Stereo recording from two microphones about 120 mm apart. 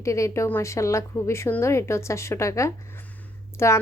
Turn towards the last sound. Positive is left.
turn(degrees=20)  # may be behind; listen again after turning